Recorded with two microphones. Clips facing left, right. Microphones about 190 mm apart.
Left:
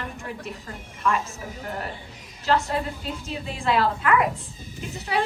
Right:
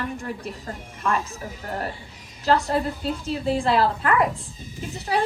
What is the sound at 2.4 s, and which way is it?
A woman's voice, 40° right (ahead or behind).